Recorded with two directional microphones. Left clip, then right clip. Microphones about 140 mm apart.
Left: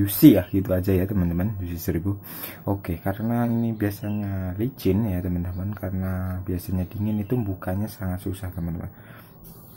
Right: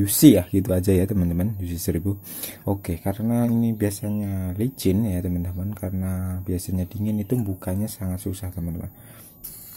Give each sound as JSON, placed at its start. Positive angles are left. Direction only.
{"t": 0.0, "sound": "speech", "side_deg": -40}
{"t": 5.0, "sound": "speech", "side_deg": -40}